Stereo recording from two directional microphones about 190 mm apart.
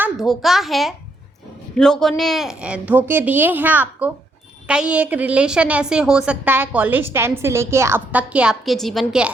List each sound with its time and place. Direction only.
0.0 s a woman's voice: centre (ahead or behind)